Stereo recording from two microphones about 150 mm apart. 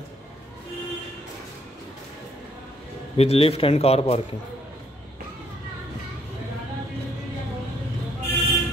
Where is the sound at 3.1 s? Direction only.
40° left (ahead or behind).